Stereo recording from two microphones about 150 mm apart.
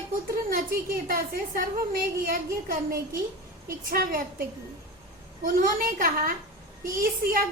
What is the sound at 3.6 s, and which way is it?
Speech, 75° right (ahead or behind).